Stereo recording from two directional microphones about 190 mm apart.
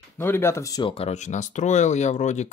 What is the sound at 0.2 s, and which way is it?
Speech, 10° left (ahead or behind).